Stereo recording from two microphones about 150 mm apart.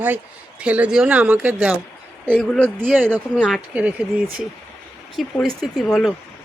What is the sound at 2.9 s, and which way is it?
Speech, 10° right (ahead or behind).